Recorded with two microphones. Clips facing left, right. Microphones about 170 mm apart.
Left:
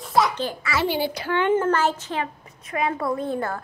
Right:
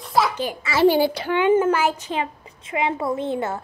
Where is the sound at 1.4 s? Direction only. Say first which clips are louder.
Right 3 dB; 10° right (ahead or behind).